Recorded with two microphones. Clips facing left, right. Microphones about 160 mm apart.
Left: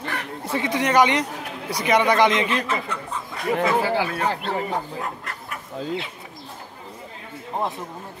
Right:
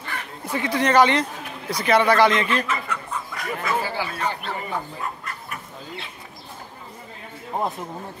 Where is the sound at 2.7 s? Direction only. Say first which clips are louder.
Left 1 dB; 30° left (ahead or behind).